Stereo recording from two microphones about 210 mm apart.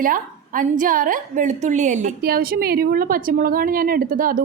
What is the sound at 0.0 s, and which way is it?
A woman's voice, 40° right (ahead or behind).